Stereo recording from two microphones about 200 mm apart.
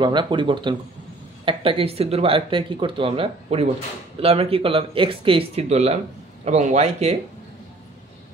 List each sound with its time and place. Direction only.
0.0 s a man's voice: 25° right (ahead or behind)